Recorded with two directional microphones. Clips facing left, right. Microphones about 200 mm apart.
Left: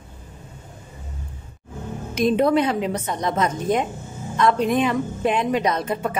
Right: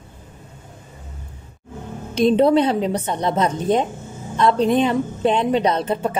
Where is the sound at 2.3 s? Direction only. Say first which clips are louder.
Right 3 dB; 30° right (ahead or behind).